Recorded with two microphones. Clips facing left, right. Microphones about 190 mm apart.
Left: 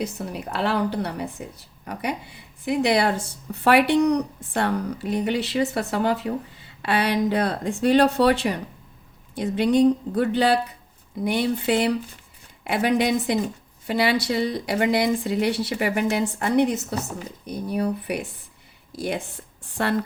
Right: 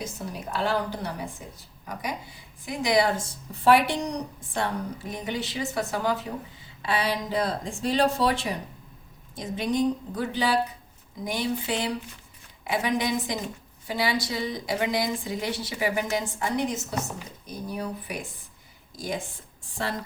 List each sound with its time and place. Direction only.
0.0 s a woman's voice: 65° left (ahead or behind)